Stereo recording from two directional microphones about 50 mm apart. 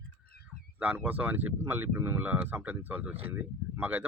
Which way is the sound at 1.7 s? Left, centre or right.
Right.